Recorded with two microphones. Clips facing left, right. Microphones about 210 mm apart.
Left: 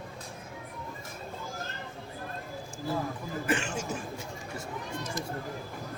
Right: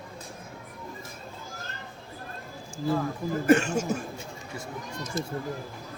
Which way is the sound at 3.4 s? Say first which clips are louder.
Right 10 dB; 40° right (ahead or behind).